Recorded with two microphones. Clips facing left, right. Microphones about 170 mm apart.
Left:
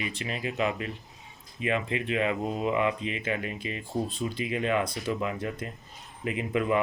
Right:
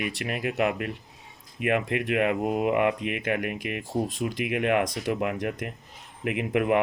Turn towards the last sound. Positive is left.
turn(degrees=-70)  # may be behind; listen again after turning